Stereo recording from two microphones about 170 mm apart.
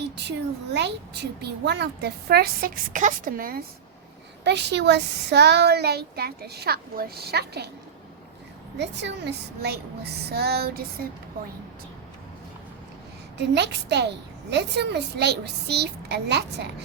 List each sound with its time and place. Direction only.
0.0 s speech: 85° right; by 3.6 s 55° right (ahead or behind)
4.4 s speech: 85° right
8.8 s speech: 90° right; by 10.8 s 65° right (ahead or behind)
13.4 s a woman's voice: 90° right